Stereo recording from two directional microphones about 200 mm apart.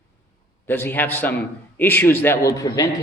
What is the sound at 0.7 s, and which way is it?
A man's voice, 10° left (ahead or behind).